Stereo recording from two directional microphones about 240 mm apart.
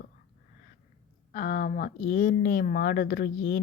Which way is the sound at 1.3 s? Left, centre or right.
Left.